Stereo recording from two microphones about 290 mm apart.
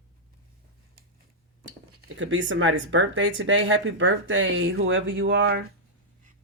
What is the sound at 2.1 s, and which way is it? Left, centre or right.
Speech, right.